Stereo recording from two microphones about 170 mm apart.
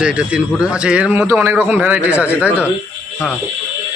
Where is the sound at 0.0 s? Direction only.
5° right (ahead or behind).